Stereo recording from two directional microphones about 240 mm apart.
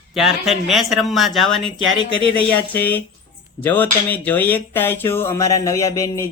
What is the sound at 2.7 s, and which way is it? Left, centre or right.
Speech, centre.